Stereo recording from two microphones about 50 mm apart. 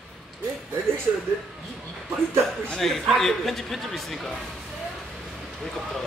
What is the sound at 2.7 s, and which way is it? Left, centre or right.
Speech, centre.